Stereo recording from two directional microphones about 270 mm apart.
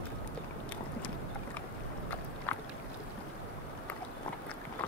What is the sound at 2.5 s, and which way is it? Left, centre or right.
Boat, centre.